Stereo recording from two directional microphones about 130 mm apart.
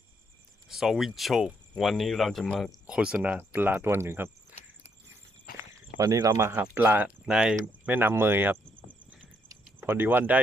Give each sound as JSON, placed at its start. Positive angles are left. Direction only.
{"t": 0.7, "sound": "speech", "side_deg": -5}
{"t": 2.8, "sound": "speech", "side_deg": -5}
{"t": 6.0, "sound": "speech", "side_deg": -25}
{"t": 6.5, "sound": "speech", "side_deg": -15}
{"t": 9.5, "sound": "cricket", "side_deg": -15}